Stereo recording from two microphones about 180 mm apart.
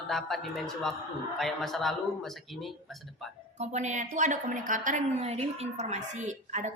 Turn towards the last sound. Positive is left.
turn(degrees=-40)  # may be behind; listen again after turning